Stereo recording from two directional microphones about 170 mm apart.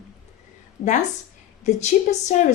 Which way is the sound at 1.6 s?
40° left (ahead or behind).